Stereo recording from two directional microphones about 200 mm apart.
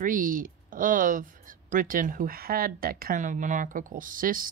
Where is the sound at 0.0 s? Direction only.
45° right (ahead or behind).